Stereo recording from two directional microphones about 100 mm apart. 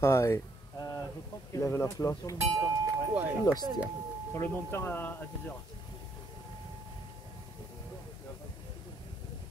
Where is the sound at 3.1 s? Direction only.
15° right (ahead or behind).